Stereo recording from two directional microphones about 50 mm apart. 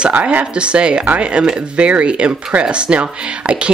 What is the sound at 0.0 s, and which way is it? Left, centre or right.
A woman's voice, right.